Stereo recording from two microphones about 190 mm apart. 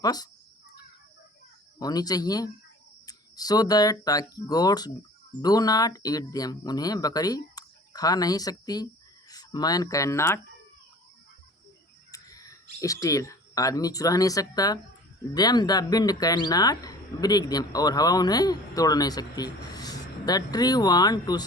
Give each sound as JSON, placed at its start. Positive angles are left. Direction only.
{"t": 0.0, "sound": "speech", "side_deg": 20}
{"t": 1.8, "sound": "speech", "side_deg": 20}
{"t": 12.1, "sound": "a sound", "side_deg": 20}
{"t": 12.8, "sound": "speech", "side_deg": 15}